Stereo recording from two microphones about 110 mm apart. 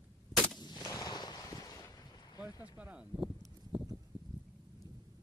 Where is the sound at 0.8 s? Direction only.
35° left (ahead or behind).